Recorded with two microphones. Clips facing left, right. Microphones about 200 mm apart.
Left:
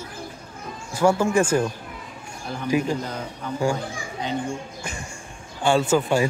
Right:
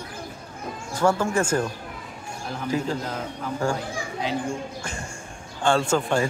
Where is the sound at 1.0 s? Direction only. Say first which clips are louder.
Left 3 dB; 10° left (ahead or behind).